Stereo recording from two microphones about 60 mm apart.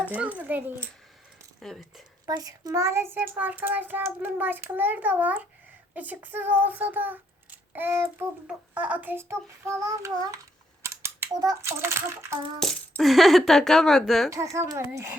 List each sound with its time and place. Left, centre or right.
0.1 s a child's voice: right
1.6 s speech: centre
2.2 s a child's voice: right
2.8 s speech: right
3.2 s a child's voice: right
8.4 s a child's voice: right
9.8 s child singing: right
10.8 s scissors: right
11.6 s speech: right
13.0 s a woman's voice: centre
14.3 s a child's voice: right